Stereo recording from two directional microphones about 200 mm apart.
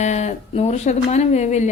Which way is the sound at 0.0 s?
35° left (ahead or behind).